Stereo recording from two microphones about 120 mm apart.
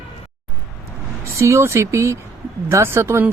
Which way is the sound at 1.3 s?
25° right (ahead or behind).